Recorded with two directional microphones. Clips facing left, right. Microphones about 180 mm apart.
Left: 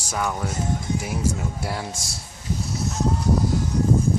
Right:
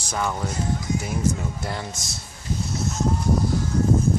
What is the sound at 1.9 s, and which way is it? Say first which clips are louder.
Speech: left 1 dB; 30° left (ahead or behind).